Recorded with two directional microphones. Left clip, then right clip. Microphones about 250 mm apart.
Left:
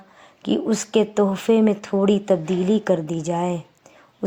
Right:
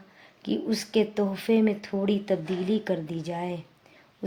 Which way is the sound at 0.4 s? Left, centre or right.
Left.